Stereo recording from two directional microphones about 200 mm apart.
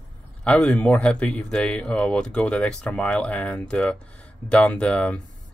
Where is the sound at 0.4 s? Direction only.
5° left (ahead or behind).